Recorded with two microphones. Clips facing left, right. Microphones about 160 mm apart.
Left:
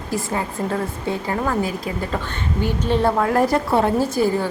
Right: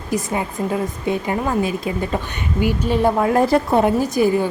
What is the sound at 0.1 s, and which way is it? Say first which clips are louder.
A woman's voice: right 2 dB; 15° right (ahead or behind).